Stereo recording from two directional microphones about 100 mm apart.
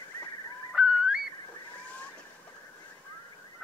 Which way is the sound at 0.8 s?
5° right (ahead or behind).